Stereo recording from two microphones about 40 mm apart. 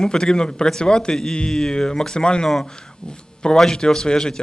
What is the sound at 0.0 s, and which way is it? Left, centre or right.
A man's voice, centre.